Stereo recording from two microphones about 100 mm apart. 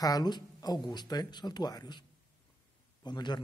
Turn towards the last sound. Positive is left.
turn(degrees=45)  # may be behind; listen again after turning